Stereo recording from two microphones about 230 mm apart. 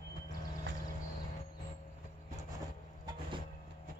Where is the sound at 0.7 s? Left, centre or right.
Right.